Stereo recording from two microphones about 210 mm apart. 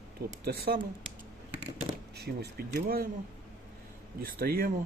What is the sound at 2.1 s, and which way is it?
Speech, 50° right (ahead or behind).